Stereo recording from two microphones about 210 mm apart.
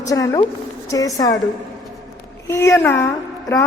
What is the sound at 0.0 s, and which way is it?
A man's voice, 15° left (ahead or behind).